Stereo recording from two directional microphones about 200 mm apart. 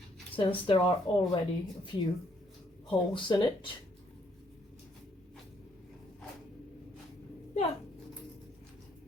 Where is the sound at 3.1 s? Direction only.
25° left (ahead or behind).